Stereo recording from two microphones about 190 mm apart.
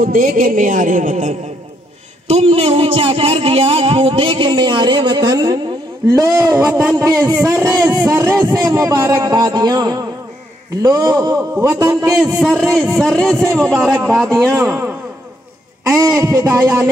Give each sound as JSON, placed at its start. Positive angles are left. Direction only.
{"t": 0.0, "sound": "speech", "side_deg": -45}
{"t": 2.3, "sound": "a sound", "side_deg": -30}
{"t": 6.9, "sound": "a man's voice", "side_deg": -20}
{"t": 10.8, "sound": "a sound", "side_deg": -20}
{"t": 11.8, "sound": "a man's voice", "side_deg": -15}
{"t": 12.4, "sound": "a man's voice", "side_deg": 0}